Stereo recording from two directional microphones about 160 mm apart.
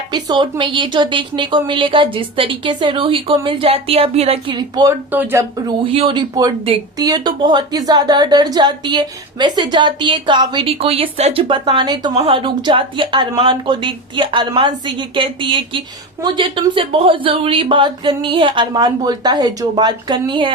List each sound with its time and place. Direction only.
0.1 s a woman's voice: 25° right (ahead or behind)
5.1 s speech: 15° right (ahead or behind)
5.8 s a woman's voice: 35° right (ahead or behind)